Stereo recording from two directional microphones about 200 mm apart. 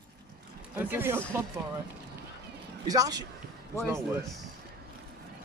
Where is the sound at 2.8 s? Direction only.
20° right (ahead or behind).